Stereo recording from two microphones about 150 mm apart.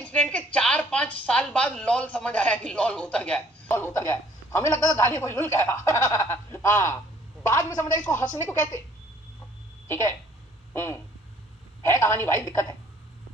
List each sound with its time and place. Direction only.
0.0 s a sound: 10° left (ahead or behind)
5.2 s a woman's voice: 20° left (ahead or behind)
11.8 s speech: 20° left (ahead or behind)